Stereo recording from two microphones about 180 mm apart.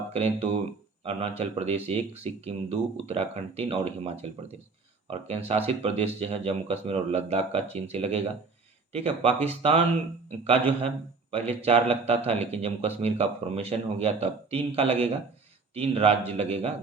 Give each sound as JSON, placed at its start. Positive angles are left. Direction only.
{"t": 0.1, "sound": "a man's voice", "side_deg": -35}
{"t": 11.3, "sound": "a man's voice", "side_deg": -35}